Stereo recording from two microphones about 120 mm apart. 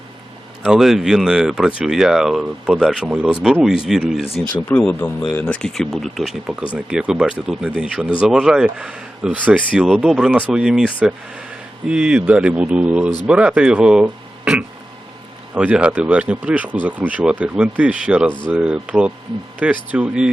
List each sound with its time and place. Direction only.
0.6 s speech: 5° right (ahead or behind)
4.7 s speech: 20° left (ahead or behind); by 20.3 s 10° right (ahead or behind)